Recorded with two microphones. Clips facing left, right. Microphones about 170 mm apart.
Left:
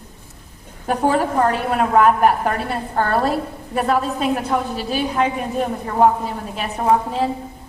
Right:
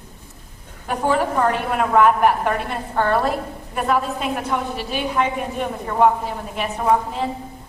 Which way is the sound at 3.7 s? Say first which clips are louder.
Left 2 dB; 40° left (ahead or behind).